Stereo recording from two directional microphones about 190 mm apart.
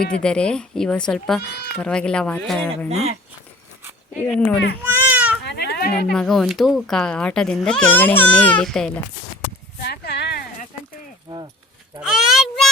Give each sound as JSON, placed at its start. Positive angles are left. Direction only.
{"t": 0.1, "sound": "speech", "side_deg": 5}
{"t": 2.9, "sound": "speech", "side_deg": -35}
{"t": 4.3, "sound": "a child's voice", "side_deg": 5}
{"t": 4.9, "sound": "baby cry", "side_deg": -10}
{"t": 5.5, "sound": "a sound", "side_deg": 55}
{"t": 6.1, "sound": "speech", "side_deg": 0}
{"t": 9.8, "sound": "a sound", "side_deg": 60}
{"t": 11.9, "sound": "child singing", "side_deg": 0}